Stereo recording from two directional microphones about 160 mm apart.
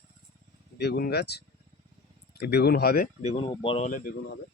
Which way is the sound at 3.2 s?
45° left (ahead or behind).